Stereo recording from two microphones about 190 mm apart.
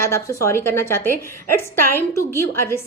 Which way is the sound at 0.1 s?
15° left (ahead or behind).